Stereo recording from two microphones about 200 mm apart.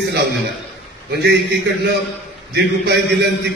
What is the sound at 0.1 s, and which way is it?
Speech, 60° right (ahead or behind).